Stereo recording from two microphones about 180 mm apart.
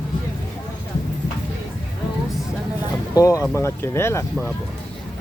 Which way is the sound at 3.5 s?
15° left (ahead or behind).